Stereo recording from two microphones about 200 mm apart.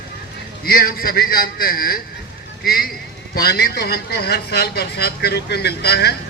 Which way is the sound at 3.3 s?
50° left (ahead or behind).